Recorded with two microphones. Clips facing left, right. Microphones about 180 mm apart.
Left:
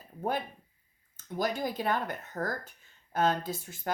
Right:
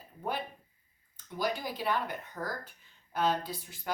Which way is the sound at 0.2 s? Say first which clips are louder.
Left 4 dB; 45° left (ahead or behind).